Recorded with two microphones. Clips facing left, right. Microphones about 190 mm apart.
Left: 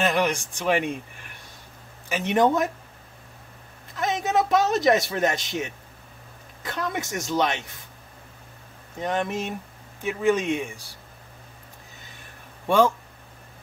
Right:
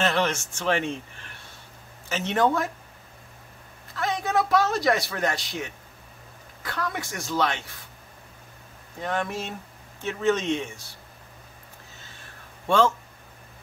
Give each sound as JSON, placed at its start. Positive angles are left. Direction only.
{"t": 0.0, "sound": "a man's voice", "side_deg": 15}
{"t": 3.9, "sound": "a man's voice", "side_deg": 20}
{"t": 9.0, "sound": "a man's voice", "side_deg": 20}
{"t": 12.6, "sound": "speech", "side_deg": 15}